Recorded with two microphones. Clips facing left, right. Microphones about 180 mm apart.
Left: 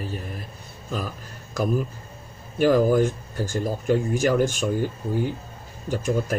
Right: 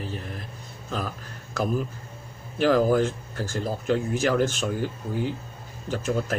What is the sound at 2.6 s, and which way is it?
A man's voice, 15° left (ahead or behind).